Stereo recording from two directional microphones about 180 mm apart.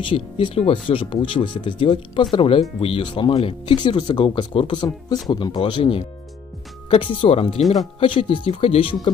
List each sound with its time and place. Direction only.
0.0 s speech: 30° left (ahead or behind)
7.1 s speech: 30° left (ahead or behind)
7.6 s speech: centre (ahead or behind)
8.0 s speech: 30° left (ahead or behind)